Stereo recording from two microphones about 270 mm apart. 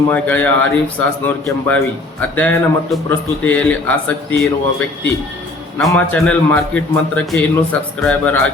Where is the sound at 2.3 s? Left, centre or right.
Centre.